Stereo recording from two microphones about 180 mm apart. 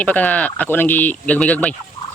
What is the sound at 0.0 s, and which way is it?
Speech, 10° left (ahead or behind).